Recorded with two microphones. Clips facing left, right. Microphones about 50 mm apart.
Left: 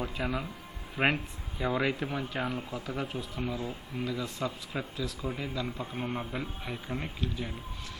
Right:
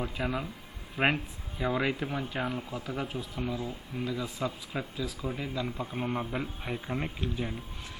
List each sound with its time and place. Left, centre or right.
0.0 s speech: centre